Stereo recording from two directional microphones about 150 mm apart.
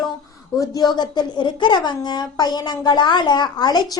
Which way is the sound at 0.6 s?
25° left (ahead or behind).